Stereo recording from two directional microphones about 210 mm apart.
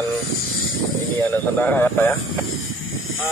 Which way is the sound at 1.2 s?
10° left (ahead or behind).